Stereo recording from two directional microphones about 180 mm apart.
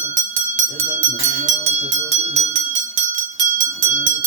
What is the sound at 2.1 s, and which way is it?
Rattle, 35° right (ahead or behind).